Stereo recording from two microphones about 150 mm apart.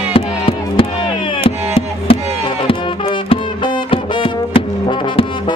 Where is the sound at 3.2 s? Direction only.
35° left (ahead or behind).